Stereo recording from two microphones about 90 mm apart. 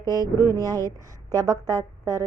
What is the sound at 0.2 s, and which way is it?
Speech, 40° right (ahead or behind).